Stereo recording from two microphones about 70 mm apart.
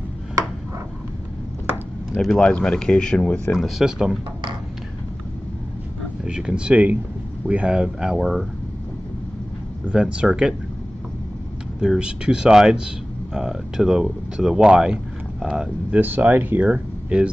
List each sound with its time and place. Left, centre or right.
2.2 s speech: centre
3.5 s speech: centre
6.2 s speech: centre
9.8 s speech: centre
11.8 s speech: centre
15.9 s speech: right
16.6 s speech: centre